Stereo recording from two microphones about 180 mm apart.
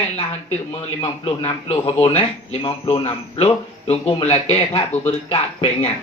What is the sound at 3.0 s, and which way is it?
Speech, 35° left (ahead or behind).